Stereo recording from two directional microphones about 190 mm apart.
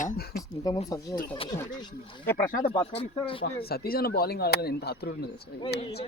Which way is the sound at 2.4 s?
45° left (ahead or behind).